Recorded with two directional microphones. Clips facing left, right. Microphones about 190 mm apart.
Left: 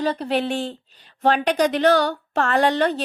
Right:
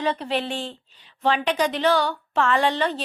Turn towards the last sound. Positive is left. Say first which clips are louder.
# left 4 dB
turn(degrees=45)  # may be behind; listen again after turning